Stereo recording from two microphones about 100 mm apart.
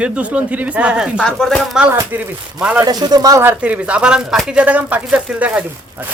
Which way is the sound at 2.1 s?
15° right (ahead or behind).